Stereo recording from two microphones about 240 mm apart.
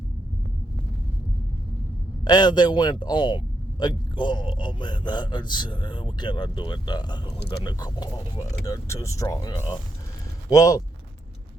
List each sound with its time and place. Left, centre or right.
2.2 s speech: centre